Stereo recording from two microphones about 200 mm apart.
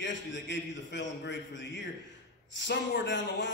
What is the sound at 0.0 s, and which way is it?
A man's voice, 65° left (ahead or behind).